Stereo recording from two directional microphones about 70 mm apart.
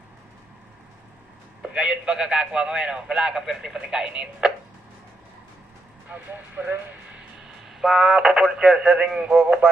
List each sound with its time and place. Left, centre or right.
1.6 s speech: centre
6.1 s speech: right
7.3 s a man's voice: centre